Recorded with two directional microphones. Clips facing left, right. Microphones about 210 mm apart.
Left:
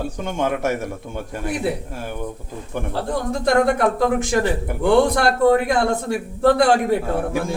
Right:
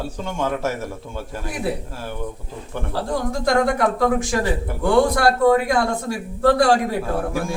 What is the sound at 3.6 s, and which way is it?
A man's voice, 25° left (ahead or behind).